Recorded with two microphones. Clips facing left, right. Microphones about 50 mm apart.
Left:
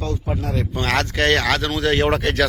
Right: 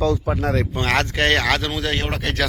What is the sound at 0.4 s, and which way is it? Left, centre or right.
Speech, right.